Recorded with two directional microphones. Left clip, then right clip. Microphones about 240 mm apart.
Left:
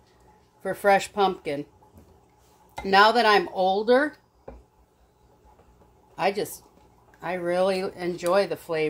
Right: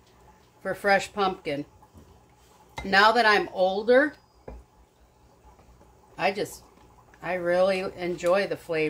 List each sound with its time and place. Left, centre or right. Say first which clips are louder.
0.6 s speech: left 2 dB; left
2.8 s speech: left 1 dB; left
6.1 s speech: left 1 dB; left